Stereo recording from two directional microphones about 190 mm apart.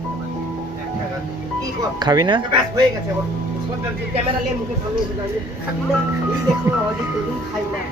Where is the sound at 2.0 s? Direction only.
20° right (ahead or behind).